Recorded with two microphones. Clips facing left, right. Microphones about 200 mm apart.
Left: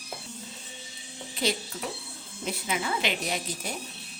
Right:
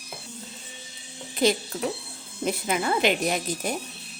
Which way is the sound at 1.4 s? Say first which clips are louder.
Right 7 dB; 45° right (ahead or behind).